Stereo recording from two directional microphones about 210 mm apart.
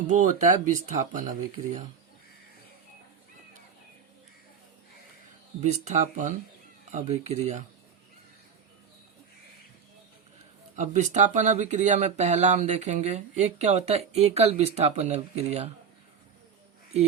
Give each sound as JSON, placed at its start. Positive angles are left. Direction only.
{"t": 0.1, "sound": "speech", "side_deg": -35}
{"t": 5.5, "sound": "speech", "side_deg": -35}
{"t": 10.8, "sound": "speech", "side_deg": -35}